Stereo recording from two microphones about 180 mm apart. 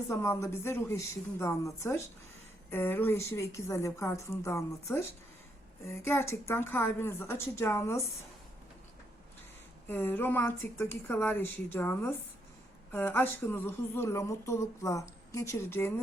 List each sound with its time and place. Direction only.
0.1 s a woman's voice: 15° left (ahead or behind)
9.9 s a woman's voice: 10° left (ahead or behind)